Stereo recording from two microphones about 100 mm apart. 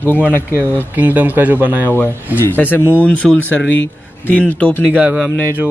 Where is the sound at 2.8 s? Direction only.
20° right (ahead or behind).